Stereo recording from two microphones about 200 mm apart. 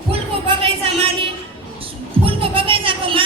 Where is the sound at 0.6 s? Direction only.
25° right (ahead or behind).